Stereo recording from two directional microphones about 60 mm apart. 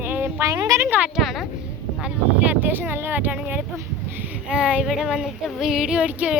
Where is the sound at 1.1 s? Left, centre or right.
Centre.